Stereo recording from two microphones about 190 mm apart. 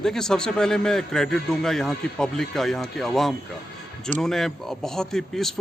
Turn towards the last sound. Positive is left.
turn(degrees=0)  # may be behind; listen again after turning